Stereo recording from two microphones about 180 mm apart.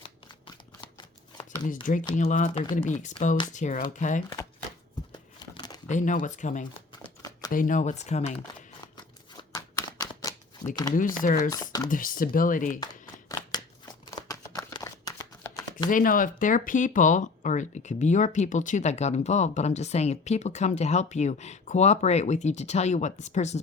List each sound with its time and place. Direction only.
0.9 s shuffling cards: 25° left (ahead or behind)
1.6 s speech: 45° left (ahead or behind)
5.4 s crumpling: 20° left (ahead or behind)
5.9 s speech: 45° left (ahead or behind)
7.2 s a sound: 20° left (ahead or behind)
7.5 s speech: 45° left (ahead or behind)
9.4 s shuffling cards: 20° left (ahead or behind)
10.9 s speech: 50° left (ahead or behind)
11.5 s speech: 20° left (ahead or behind)
11.9 s speech: 50° left (ahead or behind)
12.8 s a sound: 25° left (ahead or behind)
14.1 s shuffling cards: 20° left (ahead or behind)
15.9 s speech: 50° left (ahead or behind)